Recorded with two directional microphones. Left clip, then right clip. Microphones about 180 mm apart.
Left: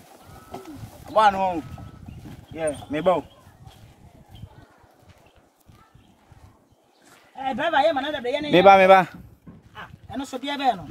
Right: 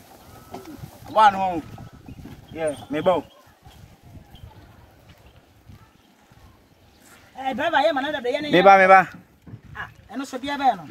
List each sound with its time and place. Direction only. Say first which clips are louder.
1.1 s speech: right 2 dB; 30° left (ahead or behind)
2.5 s a man's voice: right 1 dB; 15° left (ahead or behind)
7.3 s a man's voice: even; 15° left (ahead or behind)
8.6 s a man's voice: right 1 dB; 65° left (ahead or behind)
9.8 s dog: right 1 dB; 60° left (ahead or behind)